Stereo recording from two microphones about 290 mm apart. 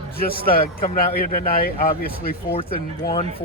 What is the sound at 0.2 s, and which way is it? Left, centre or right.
A man's voice, left.